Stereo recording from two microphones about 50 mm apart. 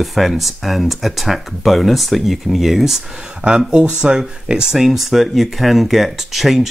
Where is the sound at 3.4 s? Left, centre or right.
Centre.